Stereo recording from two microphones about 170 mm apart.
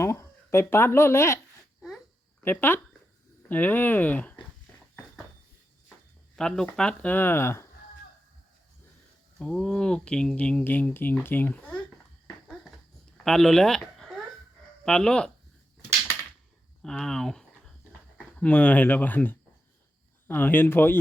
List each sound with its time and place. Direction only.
0.0 s speech: 15° left (ahead or behind)
2.4 s speech: 10° left (ahead or behind)
6.3 s speech: 5° left (ahead or behind)
9.4 s speech: 5° left (ahead or behind)
13.2 s speech: centre (ahead or behind)
16.8 s speech: 5° left (ahead or behind)